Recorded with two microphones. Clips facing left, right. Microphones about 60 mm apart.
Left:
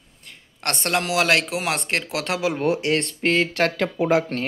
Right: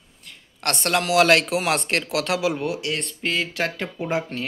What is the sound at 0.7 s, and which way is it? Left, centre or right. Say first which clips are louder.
Speech: right 1 dB; left.